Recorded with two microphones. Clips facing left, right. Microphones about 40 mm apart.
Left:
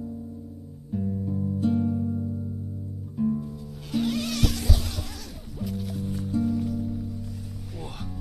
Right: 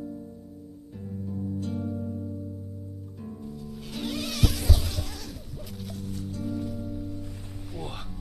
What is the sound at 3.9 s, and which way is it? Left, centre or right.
Music, centre.